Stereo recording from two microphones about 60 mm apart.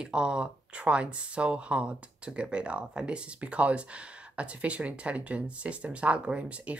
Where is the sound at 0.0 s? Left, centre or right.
Centre.